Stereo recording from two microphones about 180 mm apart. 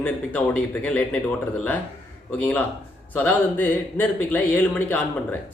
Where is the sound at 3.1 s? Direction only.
10° left (ahead or behind).